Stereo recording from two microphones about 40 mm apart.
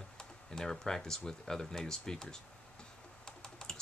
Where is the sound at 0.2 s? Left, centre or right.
Centre.